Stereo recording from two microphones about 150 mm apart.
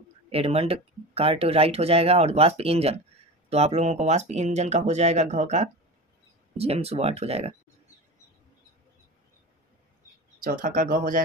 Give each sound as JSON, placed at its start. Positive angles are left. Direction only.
{"t": 0.3, "sound": "speech", "side_deg": -40}
{"t": 10.4, "sound": "speech", "side_deg": -65}